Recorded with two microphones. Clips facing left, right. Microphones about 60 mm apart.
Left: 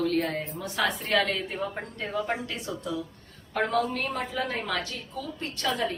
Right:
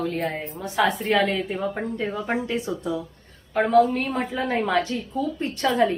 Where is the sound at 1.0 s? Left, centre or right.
Centre; by 5.9 s right.